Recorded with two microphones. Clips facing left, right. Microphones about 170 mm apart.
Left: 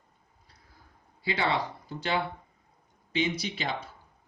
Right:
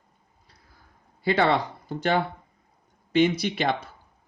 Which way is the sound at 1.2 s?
60° right (ahead or behind).